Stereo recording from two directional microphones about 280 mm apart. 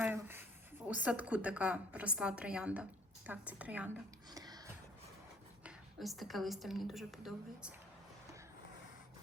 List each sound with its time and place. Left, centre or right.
0.0 s a sound: centre
0.9 s a woman's voice: centre
5.6 s a woman's voice: centre